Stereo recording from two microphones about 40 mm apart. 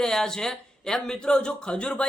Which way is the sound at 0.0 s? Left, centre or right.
Centre.